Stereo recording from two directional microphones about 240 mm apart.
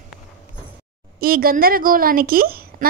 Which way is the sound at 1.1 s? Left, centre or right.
Right.